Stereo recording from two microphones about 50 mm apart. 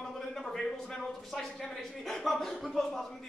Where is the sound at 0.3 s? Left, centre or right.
Centre.